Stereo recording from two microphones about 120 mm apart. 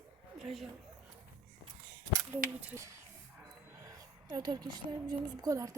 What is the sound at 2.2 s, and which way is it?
Speech, 15° right (ahead or behind).